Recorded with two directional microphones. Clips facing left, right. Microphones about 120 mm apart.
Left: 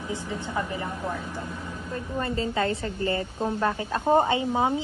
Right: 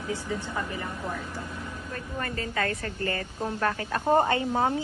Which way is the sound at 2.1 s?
20° left (ahead or behind).